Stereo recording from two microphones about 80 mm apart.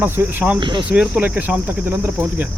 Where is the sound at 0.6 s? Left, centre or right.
Right.